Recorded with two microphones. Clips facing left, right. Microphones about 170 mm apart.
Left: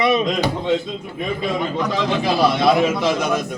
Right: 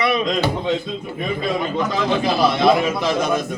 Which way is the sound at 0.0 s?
20° left (ahead or behind).